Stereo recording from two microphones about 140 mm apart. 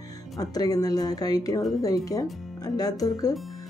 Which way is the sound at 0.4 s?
25° left (ahead or behind).